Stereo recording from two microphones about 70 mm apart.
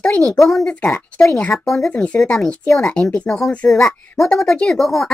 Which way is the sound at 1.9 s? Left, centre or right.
Centre.